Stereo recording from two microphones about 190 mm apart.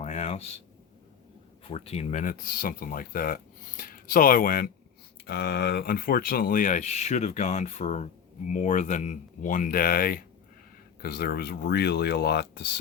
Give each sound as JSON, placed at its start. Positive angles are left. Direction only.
{"t": 0.0, "sound": "a sound", "side_deg": 40}
{"t": 1.6, "sound": "speech", "side_deg": 30}
{"t": 5.2, "sound": "speech", "side_deg": 60}